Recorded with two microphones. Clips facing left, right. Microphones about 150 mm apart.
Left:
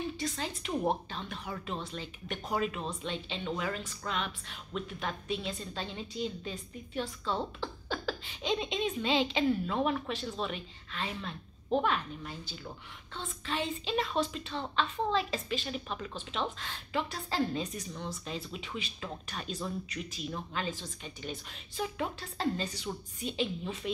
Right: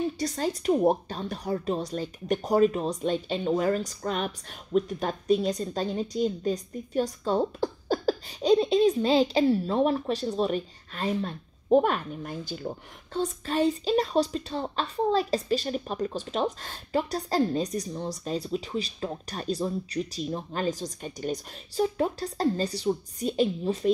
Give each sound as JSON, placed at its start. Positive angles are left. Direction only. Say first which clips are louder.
{"t": 0.2, "sound": "a woman's voice", "louder": "right 8 dB", "side_deg": -40}